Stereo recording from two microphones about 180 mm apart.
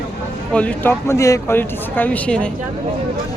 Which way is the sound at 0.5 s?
5° left (ahead or behind).